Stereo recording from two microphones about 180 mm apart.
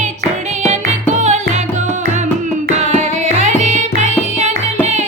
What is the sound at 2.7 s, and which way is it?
Music, 40° right (ahead or behind).